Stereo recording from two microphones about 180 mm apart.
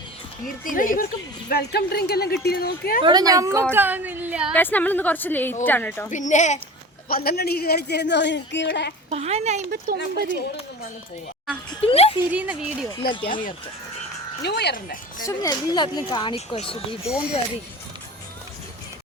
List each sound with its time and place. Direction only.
0.4 s speech: 50° left (ahead or behind)
1.5 s speech: 60° left (ahead or behind)
3.0 s a woman's voice: 20° right (ahead or behind); by 4.5 s 5° right (ahead or behind)
4.5 s a woman's voice: 10° left (ahead or behind)
6.1 s speech: 45° left (ahead or behind)
7.1 s speech: 60° left (ahead or behind)
9.0 s speech: 35° right (ahead or behind); by 10.2 s 55° right (ahead or behind)
11.8 s speech: 35° left (ahead or behind)
12.3 s a woman's voice: 10° right (ahead or behind)
13.0 s speech: 55° left (ahead or behind)
14.4 s speech: 65° left (ahead or behind)
15.3 s speech: 20° left (ahead or behind)
17.1 s speech: 5° right (ahead or behind)